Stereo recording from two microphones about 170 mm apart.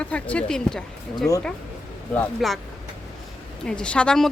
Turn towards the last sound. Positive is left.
turn(degrees=5)  # may be behind; listen again after turning